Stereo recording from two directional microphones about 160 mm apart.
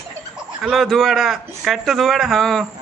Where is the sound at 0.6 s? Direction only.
Centre (ahead or behind).